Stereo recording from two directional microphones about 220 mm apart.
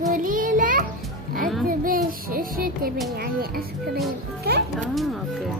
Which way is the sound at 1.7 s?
40° right (ahead or behind).